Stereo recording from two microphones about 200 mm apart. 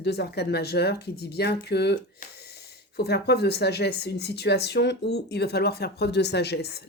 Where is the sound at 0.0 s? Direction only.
55° left (ahead or behind).